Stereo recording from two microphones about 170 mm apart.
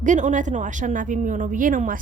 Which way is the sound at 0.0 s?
45° right (ahead or behind).